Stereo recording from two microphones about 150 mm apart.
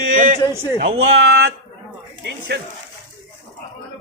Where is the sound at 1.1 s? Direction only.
90° right.